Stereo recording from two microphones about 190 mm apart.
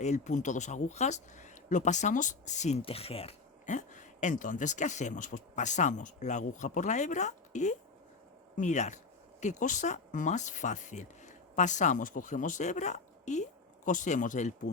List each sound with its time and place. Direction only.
0.0 s speech: 40° left (ahead or behind)